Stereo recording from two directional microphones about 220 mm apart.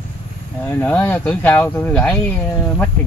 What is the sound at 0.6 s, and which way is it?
Speech, 10° left (ahead or behind).